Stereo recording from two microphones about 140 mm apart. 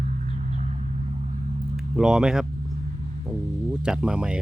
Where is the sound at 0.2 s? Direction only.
55° right (ahead or behind).